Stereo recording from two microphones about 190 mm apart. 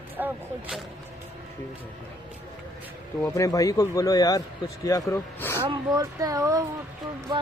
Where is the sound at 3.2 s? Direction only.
15° left (ahead or behind).